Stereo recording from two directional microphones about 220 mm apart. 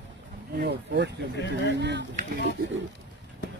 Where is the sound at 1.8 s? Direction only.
50° right (ahead or behind).